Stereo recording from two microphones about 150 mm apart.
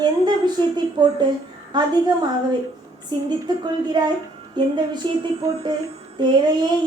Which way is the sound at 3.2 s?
30° right (ahead or behind).